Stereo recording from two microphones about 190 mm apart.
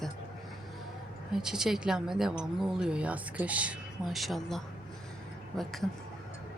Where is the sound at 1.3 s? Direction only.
5° right (ahead or behind).